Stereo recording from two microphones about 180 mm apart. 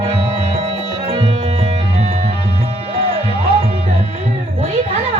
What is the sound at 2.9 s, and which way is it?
Music, 30° right (ahead or behind).